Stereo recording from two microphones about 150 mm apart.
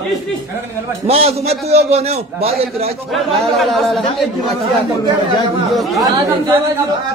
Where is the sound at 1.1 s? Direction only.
45° right (ahead or behind).